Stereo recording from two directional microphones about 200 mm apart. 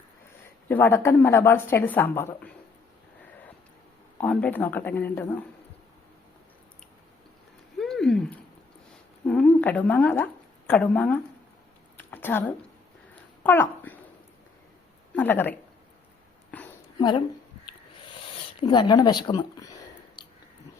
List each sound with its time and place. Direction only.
0.7 s speech: 10° left (ahead or behind)
4.2 s speech: 5° left (ahead or behind)
7.8 s a sound: centre (ahead or behind)
9.2 s speech: 5° left (ahead or behind)
11.9 s a sound: 10° left (ahead or behind)
15.1 s speech: 10° left (ahead or behind)
16.5 s a sound: 5° left (ahead or behind)
17.0 s a woman's voice: 25° left (ahead or behind)
18.6 s speech: 20° left (ahead or behind)